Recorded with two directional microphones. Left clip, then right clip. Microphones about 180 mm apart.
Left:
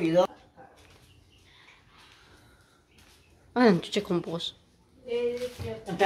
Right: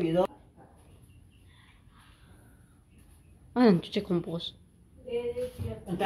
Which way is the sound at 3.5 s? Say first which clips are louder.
Left 2 dB; 10° left (ahead or behind).